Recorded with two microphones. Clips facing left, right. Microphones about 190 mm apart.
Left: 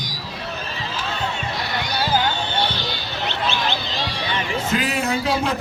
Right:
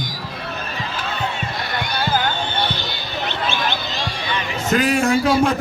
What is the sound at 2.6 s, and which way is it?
Basketball bounce, 50° right (ahead or behind).